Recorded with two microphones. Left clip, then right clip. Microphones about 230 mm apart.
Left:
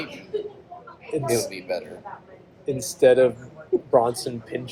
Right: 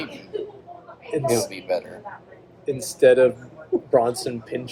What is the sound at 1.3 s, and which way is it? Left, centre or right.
Speech, right.